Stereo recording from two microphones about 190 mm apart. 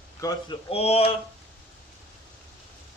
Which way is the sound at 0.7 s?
30° left (ahead or behind).